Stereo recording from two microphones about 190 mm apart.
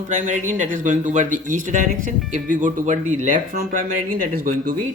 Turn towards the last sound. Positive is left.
turn(degrees=-45)  # may be behind; listen again after turning